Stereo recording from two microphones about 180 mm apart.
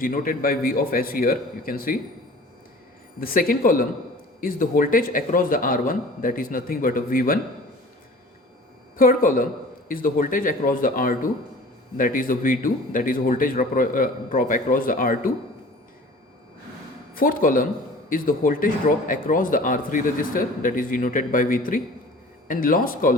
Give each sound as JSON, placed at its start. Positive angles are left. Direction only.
{"t": 0.0, "sound": "speech", "side_deg": 50}
{"t": 3.2, "sound": "speech", "side_deg": 55}
{"t": 9.0, "sound": "speech", "side_deg": 50}
{"t": 17.2, "sound": "speech", "side_deg": 50}